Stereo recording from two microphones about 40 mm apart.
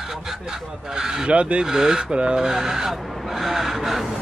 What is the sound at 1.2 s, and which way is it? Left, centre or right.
Speech, right.